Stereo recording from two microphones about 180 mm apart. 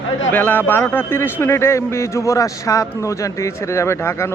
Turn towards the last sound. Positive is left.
turn(degrees=15)  # may be behind; listen again after turning